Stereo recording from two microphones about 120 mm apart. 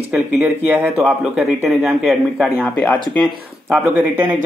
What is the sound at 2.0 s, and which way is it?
Speech, centre (ahead or behind).